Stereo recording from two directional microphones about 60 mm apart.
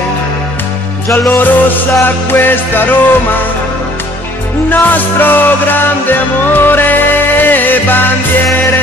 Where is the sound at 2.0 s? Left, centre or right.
Left.